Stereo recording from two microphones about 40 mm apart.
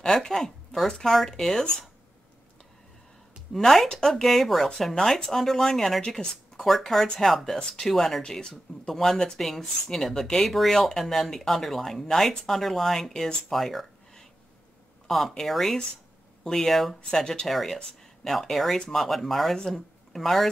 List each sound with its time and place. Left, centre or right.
0.0 s speech: centre
3.5 s speech: centre
6.6 s speech: centre
13.5 s a sound: centre
15.0 s speech: centre
17.1 s speech: centre
17.5 s speech: centre